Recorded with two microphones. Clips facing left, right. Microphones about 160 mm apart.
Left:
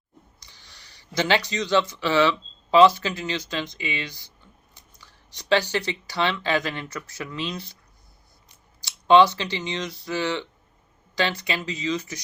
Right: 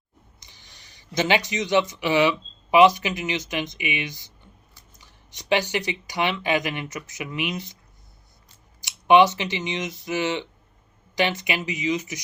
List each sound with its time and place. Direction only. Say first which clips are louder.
0.3 s speech: even; 20° right (ahead or behind)
8.8 s speech: even; 15° right (ahead or behind)